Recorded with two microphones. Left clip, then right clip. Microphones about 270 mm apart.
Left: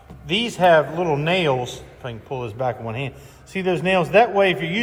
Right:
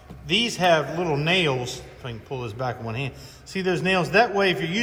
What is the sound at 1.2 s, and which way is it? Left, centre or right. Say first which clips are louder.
Speech: right 1 dB; centre.